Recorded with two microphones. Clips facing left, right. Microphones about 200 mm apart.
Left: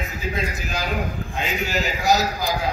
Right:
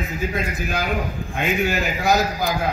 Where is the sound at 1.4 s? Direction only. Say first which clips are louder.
Right 4 dB; 55° right (ahead or behind).